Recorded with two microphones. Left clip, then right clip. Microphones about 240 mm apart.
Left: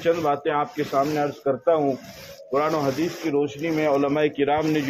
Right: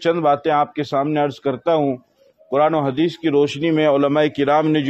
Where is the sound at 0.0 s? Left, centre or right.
Right.